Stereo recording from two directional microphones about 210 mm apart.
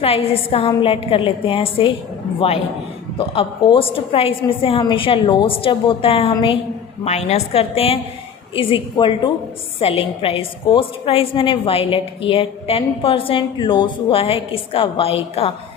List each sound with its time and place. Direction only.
0.0 s a woman's voice: 25° left (ahead or behind)
3.2 s a woman's voice: 25° left (ahead or behind)